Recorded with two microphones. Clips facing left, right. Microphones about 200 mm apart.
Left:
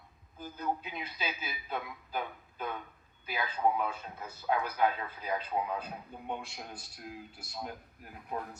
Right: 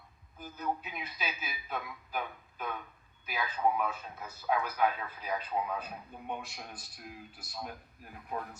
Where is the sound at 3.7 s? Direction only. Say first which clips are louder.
Even; 25° left (ahead or behind).